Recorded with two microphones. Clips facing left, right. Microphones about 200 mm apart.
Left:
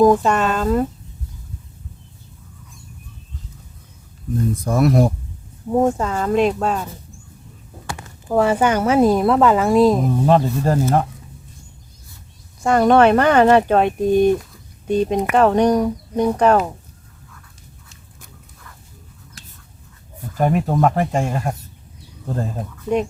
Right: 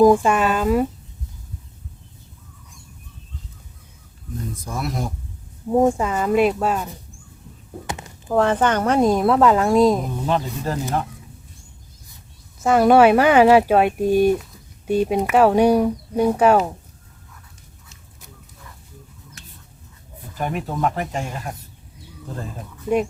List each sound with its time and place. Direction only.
0.0 s speech: 10° right (ahead or behind)
4.6 s speech: 60° left (ahead or behind)
5.6 s speech: 10° right (ahead or behind)
7.9 s a sound: 20° right (ahead or behind)
8.3 s a woman's voice: 10° left (ahead or behind)
10.2 s speech: 45° left (ahead or behind)
12.5 s speech: 5° right (ahead or behind)
20.4 s speech: 45° left (ahead or behind)
22.9 s speech: 10° right (ahead or behind)